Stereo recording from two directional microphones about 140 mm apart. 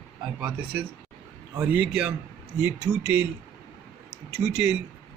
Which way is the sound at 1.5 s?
10° right (ahead or behind).